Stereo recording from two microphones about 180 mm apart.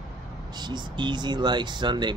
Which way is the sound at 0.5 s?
25° right (ahead or behind).